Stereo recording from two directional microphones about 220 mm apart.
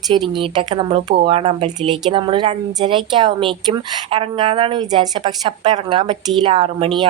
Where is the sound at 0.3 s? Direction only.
20° right (ahead or behind).